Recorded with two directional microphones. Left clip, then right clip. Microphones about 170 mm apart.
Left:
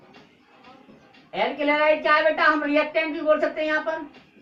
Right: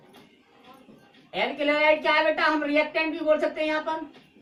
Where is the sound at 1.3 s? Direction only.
15° right (ahead or behind).